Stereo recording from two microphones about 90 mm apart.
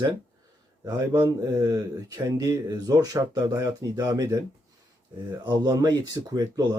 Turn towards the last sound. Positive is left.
turn(degrees=-45)  # may be behind; listen again after turning